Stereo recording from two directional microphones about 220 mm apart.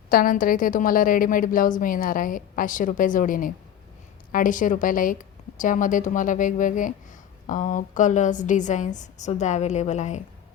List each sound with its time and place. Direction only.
0.1 s a woman's voice: 40° left (ahead or behind)